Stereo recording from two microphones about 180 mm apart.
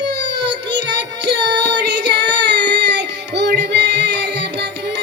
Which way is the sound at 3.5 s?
70° right (ahead or behind).